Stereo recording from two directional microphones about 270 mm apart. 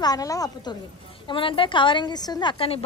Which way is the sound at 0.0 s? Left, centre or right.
Centre.